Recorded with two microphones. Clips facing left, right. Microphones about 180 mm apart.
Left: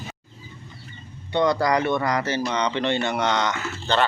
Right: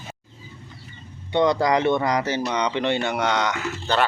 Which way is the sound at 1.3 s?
20° right (ahead or behind).